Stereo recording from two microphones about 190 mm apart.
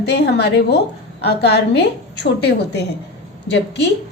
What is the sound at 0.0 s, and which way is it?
A woman's voice, 60° left (ahead or behind).